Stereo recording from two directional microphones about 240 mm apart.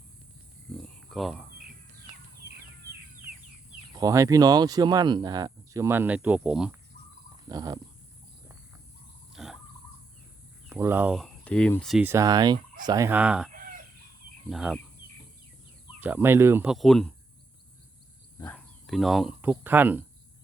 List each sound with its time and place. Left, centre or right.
1.1 s speech: centre
3.9 s speech: centre
7.4 s speech: centre
9.3 s a sound: centre
10.7 s speech: centre
13.5 s fowl: right
14.5 s speech: centre
16.0 s speech: centre
18.3 s a sound: centre
18.9 s speech: centre